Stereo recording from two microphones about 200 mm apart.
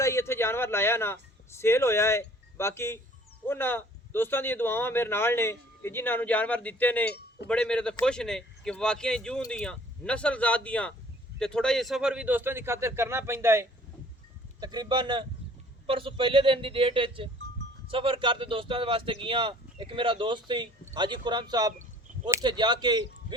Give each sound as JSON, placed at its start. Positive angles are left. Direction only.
{"t": 0.0, "sound": "a man's voice", "side_deg": 15}